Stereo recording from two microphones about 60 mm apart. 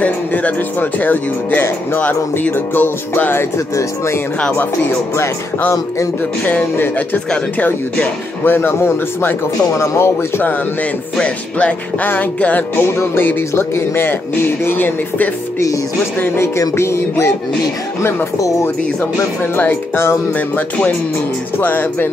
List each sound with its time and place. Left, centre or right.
0.0 s speech: left
3.5 s speech: left
6.4 s music: left
8.5 s speech: left
11.1 s music: left
13.1 s speech: left
16.7 s speech: left
18.6 s speech: left
19.5 s speech: left
20.3 s music: left
21.5 s speech: left